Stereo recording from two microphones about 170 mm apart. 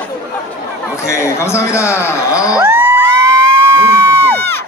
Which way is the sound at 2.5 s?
15° right (ahead or behind).